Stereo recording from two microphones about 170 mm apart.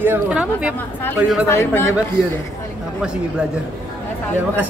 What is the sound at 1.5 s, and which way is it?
Speech, 15° left (ahead or behind).